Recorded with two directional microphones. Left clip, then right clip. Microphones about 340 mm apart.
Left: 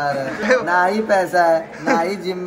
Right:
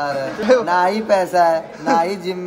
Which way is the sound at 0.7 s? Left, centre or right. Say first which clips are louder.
Even; centre.